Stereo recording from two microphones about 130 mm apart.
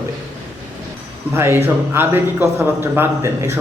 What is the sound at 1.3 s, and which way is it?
A man's voice, 20° right (ahead or behind).